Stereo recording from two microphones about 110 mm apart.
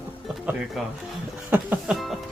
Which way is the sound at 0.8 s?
5° right (ahead or behind).